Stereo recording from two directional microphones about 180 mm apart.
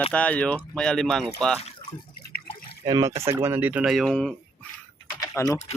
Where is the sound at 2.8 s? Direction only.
20° right (ahead or behind); by 4.3 s 5° left (ahead or behind).